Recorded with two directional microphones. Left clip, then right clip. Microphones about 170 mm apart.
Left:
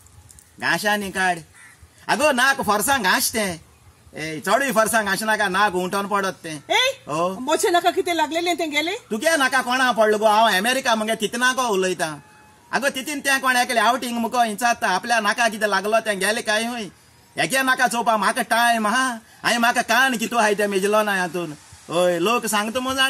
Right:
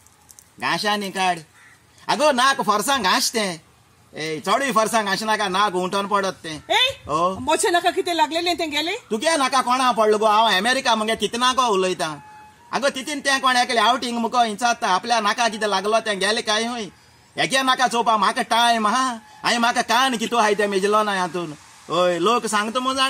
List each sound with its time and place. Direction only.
0.6 s speech: 20° left (ahead or behind)
7.3 s a woman's voice: centre (ahead or behind)
9.3 s speech: 25° left (ahead or behind)